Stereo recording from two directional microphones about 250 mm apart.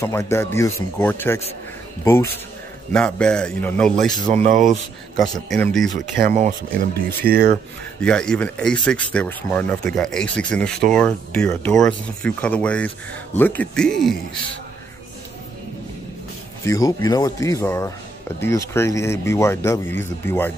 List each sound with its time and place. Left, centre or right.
0.0 s speech: centre
2.9 s speech: centre
4.3 s speech: right
5.5 s speech: centre
5.9 s speech: right
8.0 s speech: centre
16.6 s speech: centre